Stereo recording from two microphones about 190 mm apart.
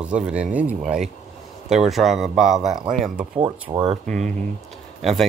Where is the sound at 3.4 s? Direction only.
25° right (ahead or behind).